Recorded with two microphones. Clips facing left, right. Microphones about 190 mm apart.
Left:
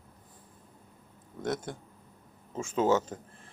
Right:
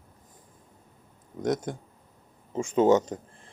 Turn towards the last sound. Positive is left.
turn(degrees=-15)  # may be behind; listen again after turning